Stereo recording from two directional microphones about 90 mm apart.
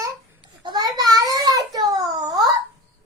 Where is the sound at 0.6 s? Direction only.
50° right (ahead or behind).